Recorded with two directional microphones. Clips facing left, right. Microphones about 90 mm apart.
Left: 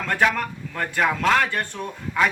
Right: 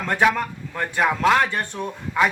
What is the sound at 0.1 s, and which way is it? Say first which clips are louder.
A man's voice: right 2 dB; 10° right (ahead or behind).